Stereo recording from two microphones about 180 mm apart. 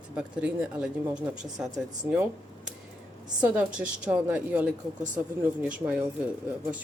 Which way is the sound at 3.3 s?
5° right (ahead or behind).